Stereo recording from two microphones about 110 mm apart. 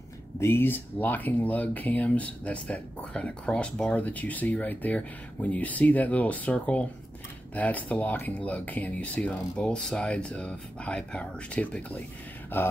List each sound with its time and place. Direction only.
0.4 s speech: 20° left (ahead or behind)